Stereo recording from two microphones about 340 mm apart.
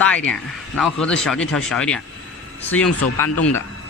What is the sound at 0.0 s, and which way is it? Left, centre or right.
Speech, centre.